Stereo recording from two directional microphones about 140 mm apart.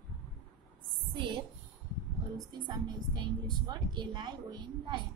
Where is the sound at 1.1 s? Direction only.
35° right (ahead or behind).